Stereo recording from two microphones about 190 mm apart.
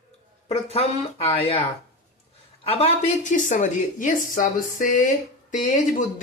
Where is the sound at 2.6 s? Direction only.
30° left (ahead or behind).